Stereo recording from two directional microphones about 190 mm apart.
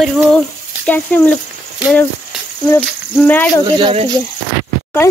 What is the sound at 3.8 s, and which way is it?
Speech, 25° right (ahead or behind).